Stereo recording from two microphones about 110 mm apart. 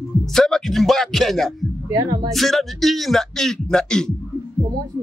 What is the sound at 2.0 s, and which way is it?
Speech, 45° right (ahead or behind).